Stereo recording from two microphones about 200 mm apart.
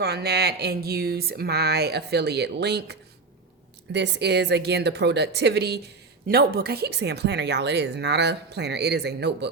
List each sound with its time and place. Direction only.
0.0 s speech: 55° right (ahead or behind)